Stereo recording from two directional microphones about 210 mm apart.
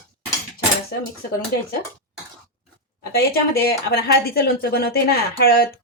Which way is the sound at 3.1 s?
45° left (ahead or behind).